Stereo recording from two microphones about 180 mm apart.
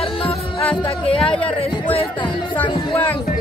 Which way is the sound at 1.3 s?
5° left (ahead or behind).